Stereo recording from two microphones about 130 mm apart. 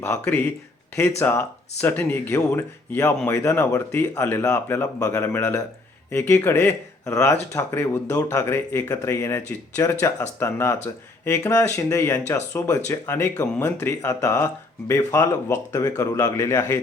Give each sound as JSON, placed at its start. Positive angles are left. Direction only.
{"t": 0.0, "sound": "speech", "side_deg": 20}